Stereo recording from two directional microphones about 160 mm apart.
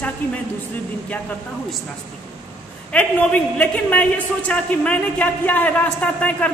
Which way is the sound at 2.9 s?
10° left (ahead or behind).